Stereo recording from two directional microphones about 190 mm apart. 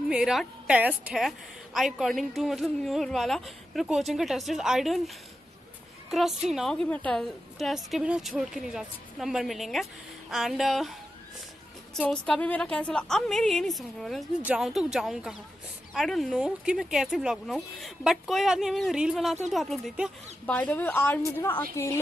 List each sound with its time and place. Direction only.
0.1 s a woman's voice: centre (ahead or behind)